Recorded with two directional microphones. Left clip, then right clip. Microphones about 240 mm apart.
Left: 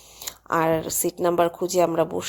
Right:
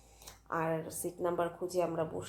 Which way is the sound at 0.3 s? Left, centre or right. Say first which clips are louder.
Left 13 dB; left.